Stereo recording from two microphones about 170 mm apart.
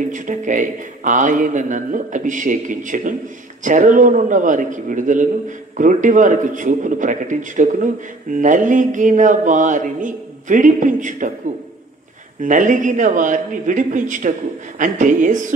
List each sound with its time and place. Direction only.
0.1 s a man's voice: 50° right (ahead or behind)
12.4 s a man's voice: 50° right (ahead or behind)